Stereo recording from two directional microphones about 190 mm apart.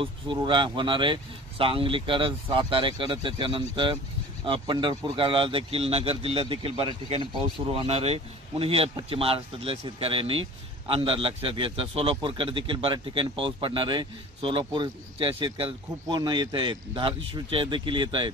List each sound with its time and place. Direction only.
0.0 s a man's voice: 25° right (ahead or behind)